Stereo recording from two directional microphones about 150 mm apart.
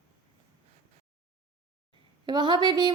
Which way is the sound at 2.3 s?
30° right (ahead or behind).